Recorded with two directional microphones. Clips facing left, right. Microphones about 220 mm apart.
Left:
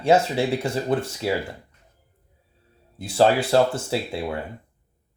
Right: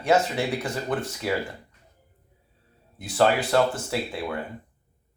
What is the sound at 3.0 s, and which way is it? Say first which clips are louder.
Speech: left 3 dB; 30° left (ahead or behind).